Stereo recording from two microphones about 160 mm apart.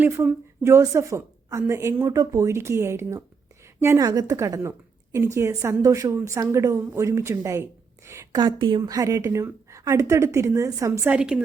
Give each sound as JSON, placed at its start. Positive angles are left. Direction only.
{"t": 0.6, "sound": "a woman's voice", "side_deg": -15}